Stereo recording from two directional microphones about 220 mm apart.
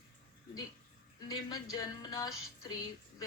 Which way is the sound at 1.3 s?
15° left (ahead or behind).